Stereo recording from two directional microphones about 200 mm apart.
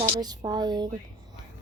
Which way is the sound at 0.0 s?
20° right (ahead or behind).